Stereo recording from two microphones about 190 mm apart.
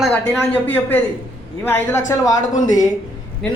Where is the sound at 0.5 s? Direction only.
10° left (ahead or behind).